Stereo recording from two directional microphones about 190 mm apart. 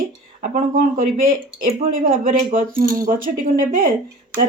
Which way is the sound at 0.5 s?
45° right (ahead or behind).